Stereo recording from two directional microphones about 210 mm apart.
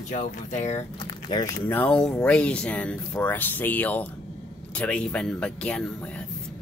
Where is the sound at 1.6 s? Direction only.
10° left (ahead or behind).